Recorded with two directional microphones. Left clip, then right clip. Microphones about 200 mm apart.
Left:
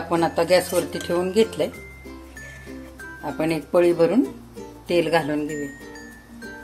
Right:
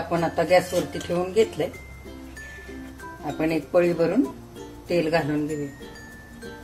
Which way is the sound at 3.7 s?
45° left (ahead or behind).